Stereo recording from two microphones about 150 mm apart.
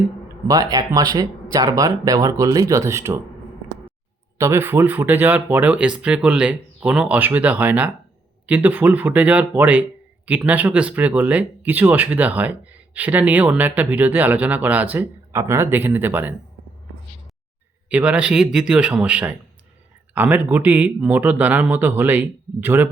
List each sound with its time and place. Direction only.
0.4 s speech: 25° right (ahead or behind)
4.4 s speech: 15° right (ahead or behind)
17.8 s speech: 10° right (ahead or behind)